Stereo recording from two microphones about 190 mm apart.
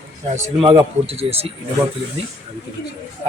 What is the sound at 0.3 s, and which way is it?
Speech, 35° right (ahead or behind).